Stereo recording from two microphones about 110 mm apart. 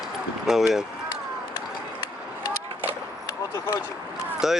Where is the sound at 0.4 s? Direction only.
5° right (ahead or behind).